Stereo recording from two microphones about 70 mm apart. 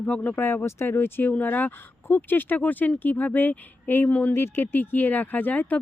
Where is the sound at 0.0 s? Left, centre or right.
Left.